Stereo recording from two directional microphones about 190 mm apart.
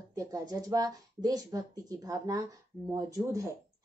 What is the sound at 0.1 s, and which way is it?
A woman's voice, 20° right (ahead or behind).